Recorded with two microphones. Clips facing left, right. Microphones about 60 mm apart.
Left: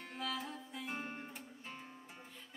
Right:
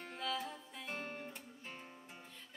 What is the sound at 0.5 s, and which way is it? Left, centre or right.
Music, centre.